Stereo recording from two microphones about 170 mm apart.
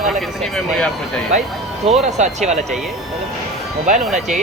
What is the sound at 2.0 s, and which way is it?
Speech, 40° right (ahead or behind).